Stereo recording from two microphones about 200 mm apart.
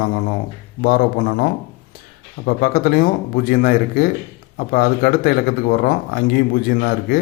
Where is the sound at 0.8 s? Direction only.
50° left (ahead or behind).